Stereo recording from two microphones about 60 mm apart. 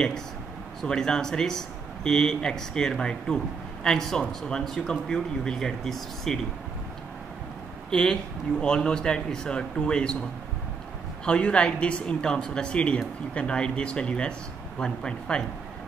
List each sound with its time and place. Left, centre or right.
0.8 s speech: centre
7.9 s speech: centre
11.2 s speech: centre